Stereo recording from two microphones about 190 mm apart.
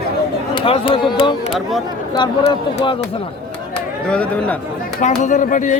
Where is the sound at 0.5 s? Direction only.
30° left (ahead or behind).